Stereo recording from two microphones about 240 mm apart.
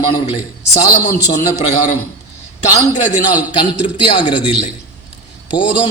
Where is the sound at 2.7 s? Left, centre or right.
Left.